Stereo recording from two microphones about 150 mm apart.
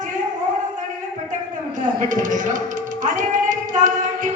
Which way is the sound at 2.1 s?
60° right (ahead or behind).